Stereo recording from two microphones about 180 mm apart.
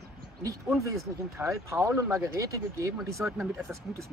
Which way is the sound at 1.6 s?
15° right (ahead or behind).